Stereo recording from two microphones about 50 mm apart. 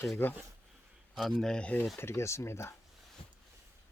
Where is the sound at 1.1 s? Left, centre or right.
Centre.